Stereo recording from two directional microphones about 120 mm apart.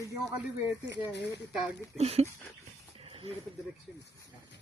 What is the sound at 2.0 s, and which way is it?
Speech, 60° right (ahead or behind).